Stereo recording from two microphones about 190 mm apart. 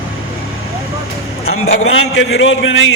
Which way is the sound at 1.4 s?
90° left.